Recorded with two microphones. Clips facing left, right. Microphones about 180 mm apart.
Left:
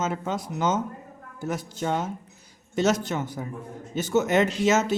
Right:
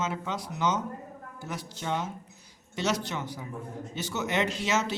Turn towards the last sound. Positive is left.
turn(degrees=45)  # may be behind; listen again after turning